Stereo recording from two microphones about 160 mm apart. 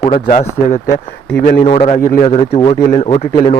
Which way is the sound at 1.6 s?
35° left (ahead or behind).